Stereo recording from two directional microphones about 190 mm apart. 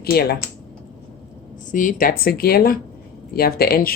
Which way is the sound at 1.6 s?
45° left (ahead or behind).